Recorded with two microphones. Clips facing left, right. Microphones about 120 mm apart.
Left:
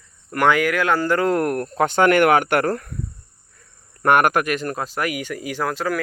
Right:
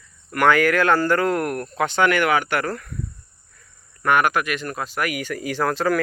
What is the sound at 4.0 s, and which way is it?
Speech, 50° left (ahead or behind).